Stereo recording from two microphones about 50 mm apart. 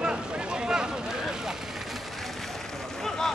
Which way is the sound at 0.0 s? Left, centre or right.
Centre.